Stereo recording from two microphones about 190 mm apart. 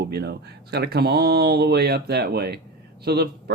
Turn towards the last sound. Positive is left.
turn(degrees=-55)  # may be behind; listen again after turning